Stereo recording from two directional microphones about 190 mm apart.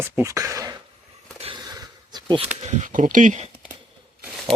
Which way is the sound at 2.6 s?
35° right (ahead or behind).